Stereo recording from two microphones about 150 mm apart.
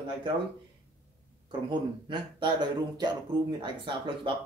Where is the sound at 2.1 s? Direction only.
30° right (ahead or behind).